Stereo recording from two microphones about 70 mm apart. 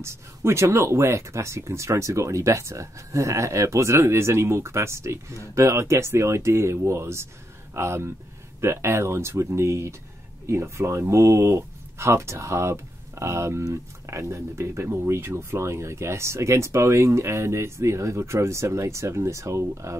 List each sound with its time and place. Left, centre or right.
0.0 s speech: right